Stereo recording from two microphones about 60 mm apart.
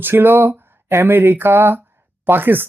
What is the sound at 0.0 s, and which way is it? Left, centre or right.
Speech, right.